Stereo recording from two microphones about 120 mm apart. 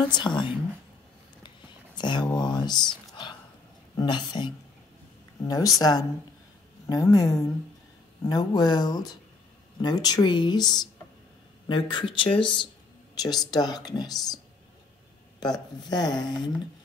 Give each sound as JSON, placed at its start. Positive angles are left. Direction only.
{"t": 0.1, "sound": "speech", "side_deg": 40}
{"t": 2.0, "sound": "speech", "side_deg": 40}
{"t": 3.9, "sound": "speech", "side_deg": 40}
{"t": 5.4, "sound": "speech", "side_deg": 30}
{"t": 13.1, "sound": "speech", "side_deg": 35}
{"t": 15.4, "sound": "speech", "side_deg": 35}